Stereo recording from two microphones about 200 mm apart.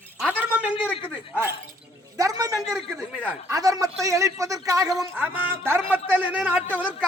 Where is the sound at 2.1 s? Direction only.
15° right (ahead or behind).